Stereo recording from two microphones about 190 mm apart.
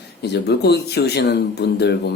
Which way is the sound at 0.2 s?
60° left (ahead or behind).